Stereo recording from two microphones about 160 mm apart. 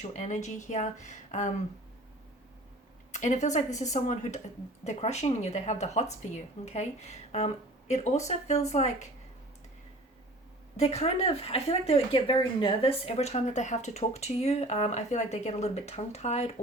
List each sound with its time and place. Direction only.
0.0 s speech: 45° left (ahead or behind)
3.1 s a woman's voice: 45° left (ahead or behind)
10.8 s speech: 40° left (ahead or behind)